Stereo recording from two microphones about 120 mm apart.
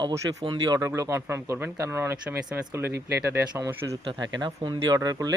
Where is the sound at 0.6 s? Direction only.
30° right (ahead or behind).